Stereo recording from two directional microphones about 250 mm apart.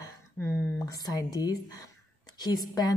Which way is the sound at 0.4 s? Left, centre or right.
Centre.